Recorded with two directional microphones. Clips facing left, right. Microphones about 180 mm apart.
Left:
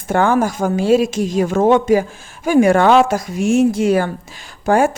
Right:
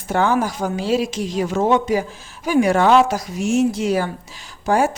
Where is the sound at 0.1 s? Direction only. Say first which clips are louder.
Left 3 dB; 50° left (ahead or behind).